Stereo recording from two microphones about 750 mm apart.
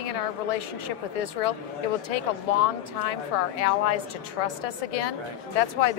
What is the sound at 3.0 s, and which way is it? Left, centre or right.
A woman's voice, left.